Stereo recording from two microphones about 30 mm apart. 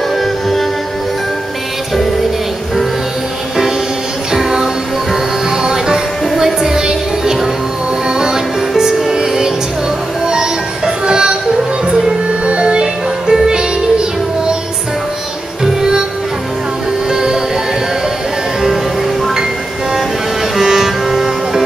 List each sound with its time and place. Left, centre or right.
0.2 s music: centre
4.3 s music: centre
8.1 s music: centre
12.4 s music: right
12.8 s music: right
15.6 s music: centre
17.1 s music: right
20.5 s music: centre